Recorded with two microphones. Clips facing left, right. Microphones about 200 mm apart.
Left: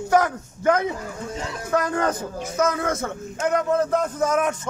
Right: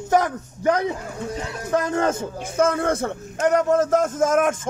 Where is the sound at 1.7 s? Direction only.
25° right (ahead or behind).